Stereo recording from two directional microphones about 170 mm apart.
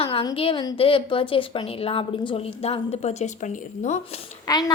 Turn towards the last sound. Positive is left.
turn(degrees=20)  # may be behind; listen again after turning